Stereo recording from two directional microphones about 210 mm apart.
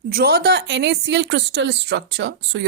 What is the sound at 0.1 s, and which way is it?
A woman's voice, 45° right (ahead or behind).